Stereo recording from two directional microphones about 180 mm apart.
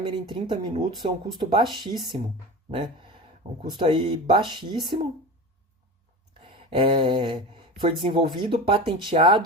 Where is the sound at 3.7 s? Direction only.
30° right (ahead or behind).